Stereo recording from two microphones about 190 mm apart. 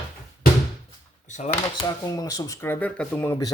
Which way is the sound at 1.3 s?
40° left (ahead or behind).